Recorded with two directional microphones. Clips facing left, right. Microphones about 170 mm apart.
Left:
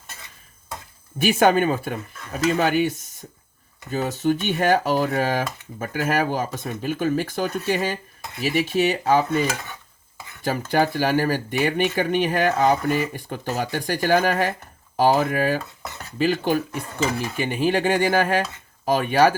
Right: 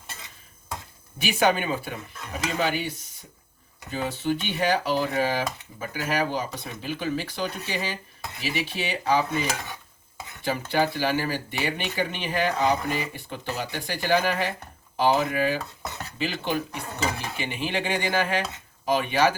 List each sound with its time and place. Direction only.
1.2 s speech: 50° left (ahead or behind)
10.4 s speech: 45° left (ahead or behind)